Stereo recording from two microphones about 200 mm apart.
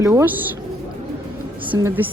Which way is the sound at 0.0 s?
15° right (ahead or behind).